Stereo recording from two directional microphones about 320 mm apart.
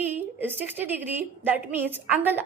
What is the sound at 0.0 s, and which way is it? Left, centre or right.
A woman's voice, centre.